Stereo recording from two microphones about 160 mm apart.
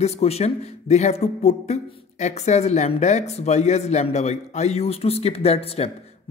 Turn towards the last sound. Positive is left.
turn(degrees=40)  # may be behind; listen again after turning